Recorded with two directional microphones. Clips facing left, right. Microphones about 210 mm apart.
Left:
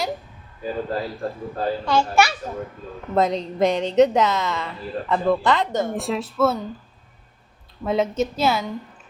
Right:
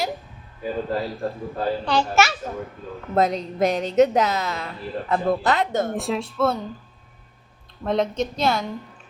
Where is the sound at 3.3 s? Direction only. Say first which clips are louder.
Left 2 dB; 5° right (ahead or behind).